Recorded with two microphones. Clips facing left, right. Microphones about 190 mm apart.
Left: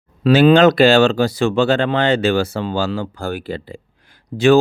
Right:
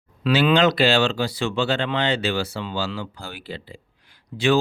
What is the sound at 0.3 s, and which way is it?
Speech, 45° left (ahead or behind).